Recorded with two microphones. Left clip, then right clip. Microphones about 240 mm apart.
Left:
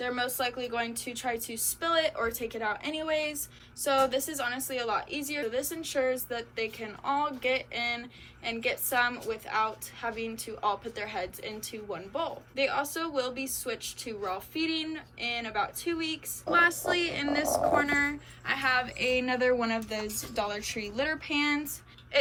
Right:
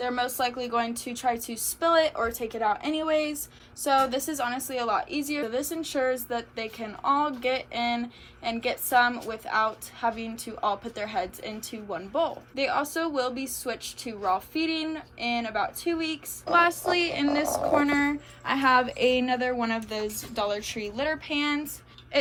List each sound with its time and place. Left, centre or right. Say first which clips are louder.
0.0 s a woman's voice: right 3 dB; centre
17.5 s speech: right 1 dB; left
18.4 s speech: right 6 dB; centre